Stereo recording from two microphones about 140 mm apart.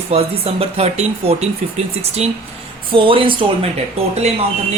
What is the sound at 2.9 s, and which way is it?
Speech, 40° right (ahead or behind).